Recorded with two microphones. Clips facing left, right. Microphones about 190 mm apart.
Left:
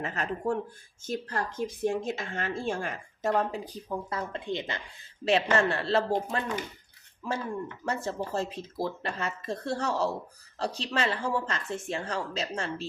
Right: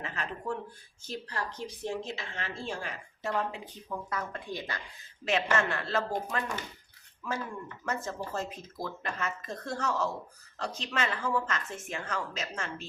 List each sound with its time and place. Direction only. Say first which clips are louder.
0.0 s speech: left 6 dB; 45° left (ahead or behind); by 4.8 s 25° left (ahead or behind)
5.2 s speech: left 4 dB; 35° left (ahead or behind)
8.0 s speech: left 4 dB; 30° left (ahead or behind)